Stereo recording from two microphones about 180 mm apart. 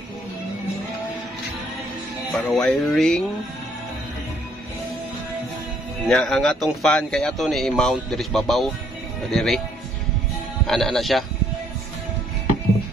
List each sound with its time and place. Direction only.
2.3 s speech: 5° left (ahead or behind)
6.0 s speech: centre (ahead or behind)
10.7 s speech: centre (ahead or behind)